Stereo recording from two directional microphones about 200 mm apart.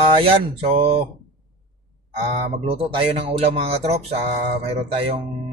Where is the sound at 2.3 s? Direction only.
30° right (ahead or behind).